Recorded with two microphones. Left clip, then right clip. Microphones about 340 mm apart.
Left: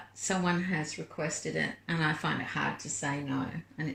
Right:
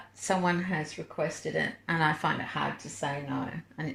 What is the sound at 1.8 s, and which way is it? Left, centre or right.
Speech, right.